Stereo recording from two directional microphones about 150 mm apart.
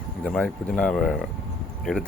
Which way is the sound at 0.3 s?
5° left (ahead or behind).